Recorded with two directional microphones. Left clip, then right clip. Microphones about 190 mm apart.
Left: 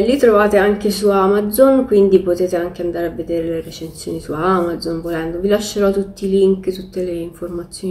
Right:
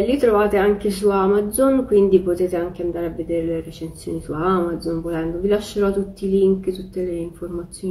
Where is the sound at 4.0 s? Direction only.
5° left (ahead or behind).